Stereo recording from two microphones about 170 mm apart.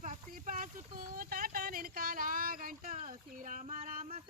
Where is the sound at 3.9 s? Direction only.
55° right (ahead or behind).